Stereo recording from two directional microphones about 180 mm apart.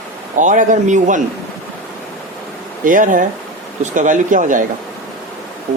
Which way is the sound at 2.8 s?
45° right (ahead or behind).